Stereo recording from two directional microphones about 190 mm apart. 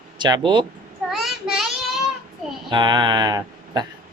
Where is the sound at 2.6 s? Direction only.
25° right (ahead or behind).